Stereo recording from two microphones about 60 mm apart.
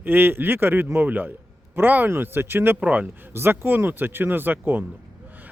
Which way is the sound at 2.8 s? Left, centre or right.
Right.